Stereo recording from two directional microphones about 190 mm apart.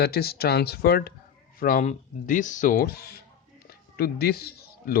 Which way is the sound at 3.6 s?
55° left (ahead or behind).